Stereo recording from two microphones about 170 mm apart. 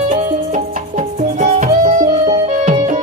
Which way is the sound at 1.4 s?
50° right (ahead or behind).